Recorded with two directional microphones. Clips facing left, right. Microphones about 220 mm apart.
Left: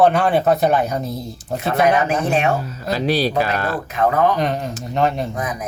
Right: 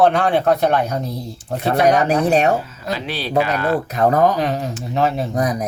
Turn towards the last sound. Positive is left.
turn(degrees=-40)  # may be behind; listen again after turning